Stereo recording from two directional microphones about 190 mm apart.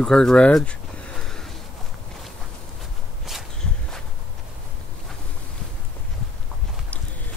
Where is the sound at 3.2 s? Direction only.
Centre (ahead or behind).